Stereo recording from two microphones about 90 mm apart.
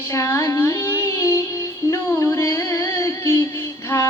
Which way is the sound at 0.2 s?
35° left (ahead or behind).